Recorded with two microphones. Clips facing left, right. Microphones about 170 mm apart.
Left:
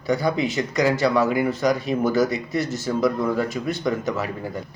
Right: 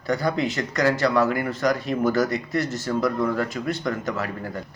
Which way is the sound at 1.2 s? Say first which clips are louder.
Left 2 dB; 20° left (ahead or behind).